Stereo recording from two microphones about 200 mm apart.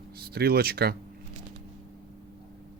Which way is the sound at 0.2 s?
50° right (ahead or behind).